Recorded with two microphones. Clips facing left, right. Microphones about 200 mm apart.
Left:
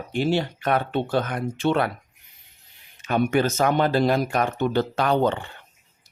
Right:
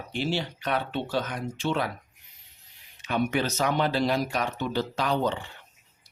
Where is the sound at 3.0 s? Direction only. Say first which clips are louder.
Left 5 dB; 50° left (ahead or behind).